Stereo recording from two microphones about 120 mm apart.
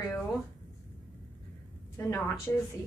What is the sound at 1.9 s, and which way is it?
Speech, 20° left (ahead or behind).